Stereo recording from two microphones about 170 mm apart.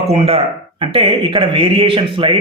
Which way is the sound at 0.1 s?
35° right (ahead or behind).